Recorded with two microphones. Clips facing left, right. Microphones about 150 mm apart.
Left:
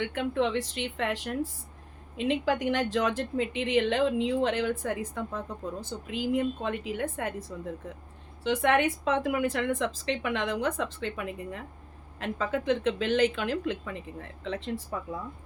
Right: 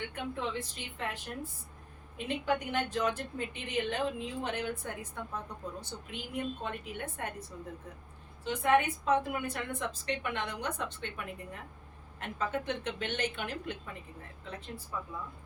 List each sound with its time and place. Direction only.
0.0 s speech: 90° left